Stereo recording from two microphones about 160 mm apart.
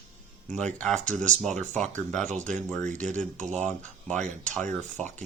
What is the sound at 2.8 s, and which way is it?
Speech, 50° right (ahead or behind).